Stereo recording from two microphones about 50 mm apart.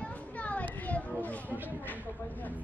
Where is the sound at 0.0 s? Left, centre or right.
Left.